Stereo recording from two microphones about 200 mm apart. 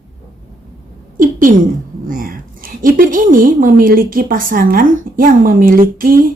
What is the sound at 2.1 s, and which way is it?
A woman's voice, 45° right (ahead or behind).